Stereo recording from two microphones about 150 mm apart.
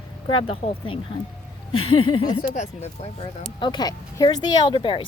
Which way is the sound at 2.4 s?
50° left (ahead or behind).